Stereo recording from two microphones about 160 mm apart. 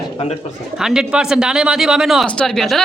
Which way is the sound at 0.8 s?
5° right (ahead or behind).